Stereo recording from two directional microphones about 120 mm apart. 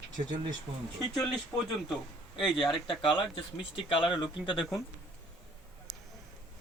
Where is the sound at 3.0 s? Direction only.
45° left (ahead or behind).